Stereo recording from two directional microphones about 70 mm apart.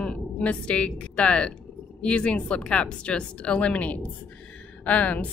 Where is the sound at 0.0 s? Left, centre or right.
Centre.